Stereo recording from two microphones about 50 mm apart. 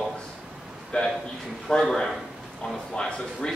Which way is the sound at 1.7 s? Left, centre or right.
Centre.